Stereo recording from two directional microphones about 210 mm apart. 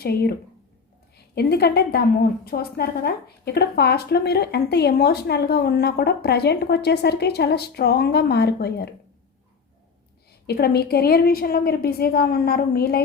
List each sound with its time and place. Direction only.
0.0 s a woman's voice: 50° left (ahead or behind)
10.4 s a woman's voice: 50° left (ahead or behind)